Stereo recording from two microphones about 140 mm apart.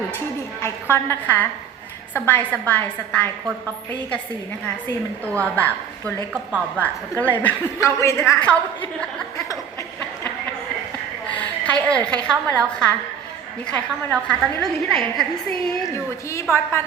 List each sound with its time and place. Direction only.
0.6 s a woman's voice: 20° left (ahead or behind)
5.5 s a woman's voice: 15° left (ahead or behind)
6.3 s a woman's voice: 15° right (ahead or behind)
6.8 s a woman's voice: 10° left (ahead or behind)
11.3 s a woman's voice: 10° left (ahead or behind)
16.3 s a woman's voice: 20° left (ahead or behind)